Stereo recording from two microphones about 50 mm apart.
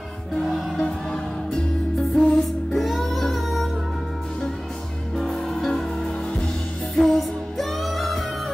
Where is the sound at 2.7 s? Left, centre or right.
Centre.